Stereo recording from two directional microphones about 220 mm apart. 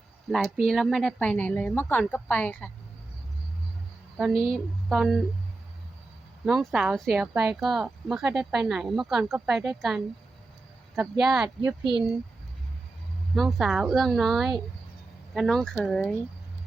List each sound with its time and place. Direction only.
0.3 s speech: centre (ahead or behind)
4.5 s speech: centre (ahead or behind)
6.4 s speech: centre (ahead or behind)
11.4 s speech: 20° right (ahead or behind)
13.3 s speech: centre (ahead or behind)